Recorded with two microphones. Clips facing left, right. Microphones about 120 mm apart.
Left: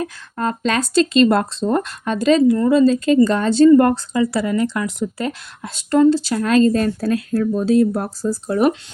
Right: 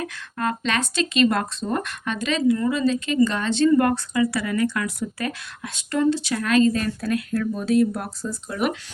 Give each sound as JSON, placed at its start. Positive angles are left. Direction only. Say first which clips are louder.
{"t": 0.0, "sound": "speech", "louder": "left 4 dB", "side_deg": 30}